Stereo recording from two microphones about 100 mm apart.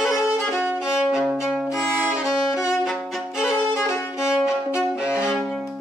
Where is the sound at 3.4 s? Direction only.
30° left (ahead or behind).